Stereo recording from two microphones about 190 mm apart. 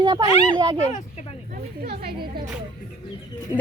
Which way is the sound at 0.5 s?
25° right (ahead or behind).